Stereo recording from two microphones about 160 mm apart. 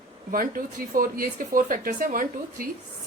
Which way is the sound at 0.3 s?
60° right (ahead or behind).